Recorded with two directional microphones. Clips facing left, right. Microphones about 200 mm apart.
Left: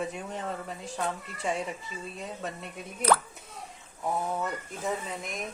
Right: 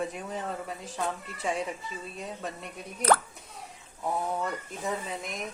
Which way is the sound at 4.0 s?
Centre (ahead or behind).